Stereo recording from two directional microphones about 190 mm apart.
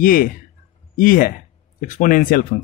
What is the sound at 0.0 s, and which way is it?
A man's voice, 50° left (ahead or behind).